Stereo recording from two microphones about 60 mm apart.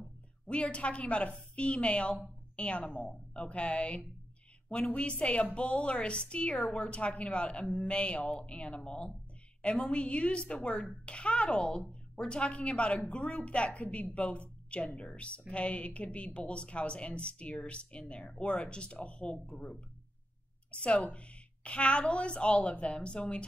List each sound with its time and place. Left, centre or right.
0.5 s a woman's voice: centre